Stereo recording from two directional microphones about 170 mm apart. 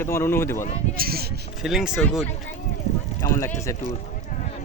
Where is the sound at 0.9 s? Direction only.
60° right (ahead or behind).